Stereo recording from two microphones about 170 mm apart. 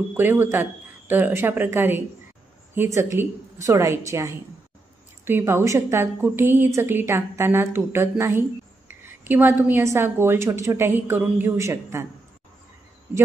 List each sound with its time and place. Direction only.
0.1 s a woman's voice: 10° right (ahead or behind)